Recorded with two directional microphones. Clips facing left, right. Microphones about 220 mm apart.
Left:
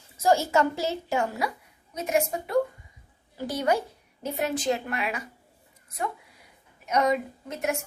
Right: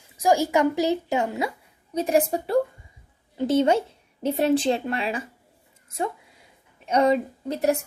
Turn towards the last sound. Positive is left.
turn(degrees=-35)  # may be behind; listen again after turning